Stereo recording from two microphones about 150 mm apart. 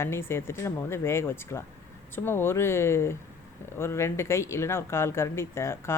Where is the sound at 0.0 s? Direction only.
15° left (ahead or behind).